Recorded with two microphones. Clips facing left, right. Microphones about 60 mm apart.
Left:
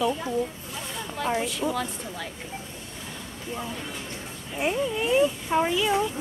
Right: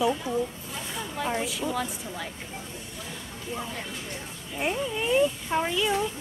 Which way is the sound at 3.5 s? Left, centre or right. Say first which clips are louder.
Left 1 dB; centre.